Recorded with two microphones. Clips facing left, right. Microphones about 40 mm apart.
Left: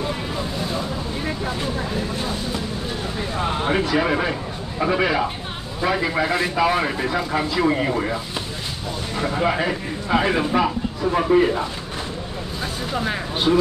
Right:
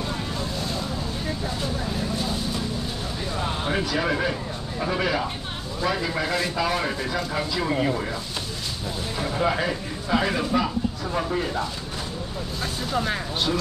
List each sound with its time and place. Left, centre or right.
1.2 s vehicle: left
3.3 s a man's voice: left
12.9 s speech: centre